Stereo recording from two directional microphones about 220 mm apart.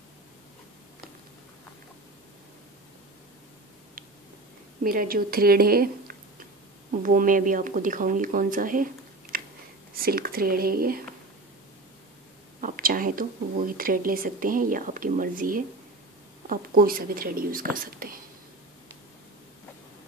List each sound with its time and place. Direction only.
4.8 s speech: 40° right (ahead or behind)
9.3 s a sound: 40° right (ahead or behind)
9.9 s speech: 40° right (ahead or behind)
12.5 s speech: 40° right (ahead or behind)